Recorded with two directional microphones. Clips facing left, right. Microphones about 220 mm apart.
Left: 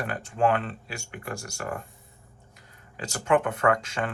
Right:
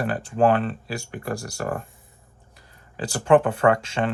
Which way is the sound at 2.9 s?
30° right (ahead or behind).